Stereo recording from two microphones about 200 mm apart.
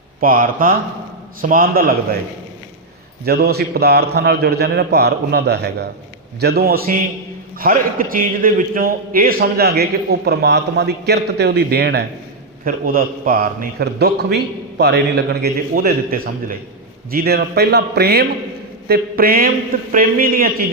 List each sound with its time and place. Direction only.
0.2 s a man's voice: 45° right (ahead or behind)
3.2 s a man's voice: 50° right (ahead or behind)
12.6 s a man's voice: 45° right (ahead or behind)